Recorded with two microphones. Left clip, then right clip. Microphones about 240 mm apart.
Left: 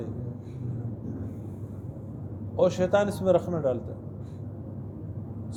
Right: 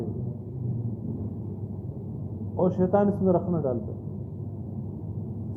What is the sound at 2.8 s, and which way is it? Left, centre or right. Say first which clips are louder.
Speech: even; left.